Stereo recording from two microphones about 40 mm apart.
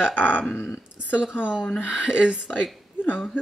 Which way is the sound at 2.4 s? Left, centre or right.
Left.